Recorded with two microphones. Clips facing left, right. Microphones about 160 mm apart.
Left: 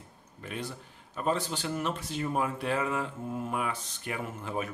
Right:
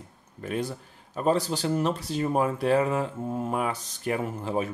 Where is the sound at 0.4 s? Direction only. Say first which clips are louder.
Right 8 dB; 40° right (ahead or behind).